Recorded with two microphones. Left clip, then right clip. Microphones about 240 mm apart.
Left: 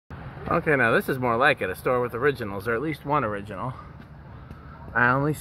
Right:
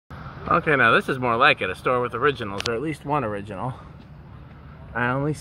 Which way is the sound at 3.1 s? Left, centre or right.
Right.